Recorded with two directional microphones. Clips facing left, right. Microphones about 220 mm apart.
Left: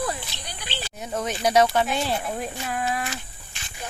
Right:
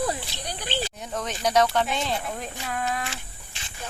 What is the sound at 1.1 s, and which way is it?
Speech, 10° left (ahead or behind).